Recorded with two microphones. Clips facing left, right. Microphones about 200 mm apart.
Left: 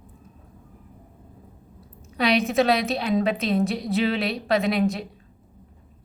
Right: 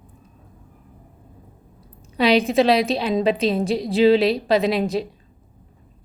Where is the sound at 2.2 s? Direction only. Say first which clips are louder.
Right 4 dB; 30° right (ahead or behind).